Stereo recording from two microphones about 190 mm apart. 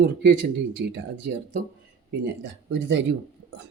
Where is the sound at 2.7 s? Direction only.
75° right (ahead or behind).